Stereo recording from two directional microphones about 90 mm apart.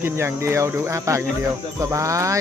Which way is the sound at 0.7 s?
30° right (ahead or behind).